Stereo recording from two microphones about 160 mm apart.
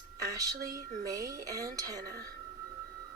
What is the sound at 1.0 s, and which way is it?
Speech, 20° right (ahead or behind).